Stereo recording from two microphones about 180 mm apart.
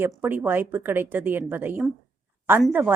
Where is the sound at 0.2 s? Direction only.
10° right (ahead or behind).